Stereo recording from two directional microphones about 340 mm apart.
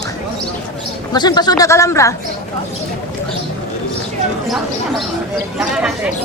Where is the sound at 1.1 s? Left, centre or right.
Centre.